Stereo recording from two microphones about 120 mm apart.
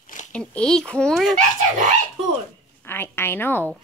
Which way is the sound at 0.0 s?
90° left.